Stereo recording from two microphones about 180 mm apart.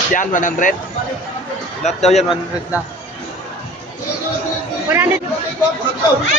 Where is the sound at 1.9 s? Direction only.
35° left (ahead or behind).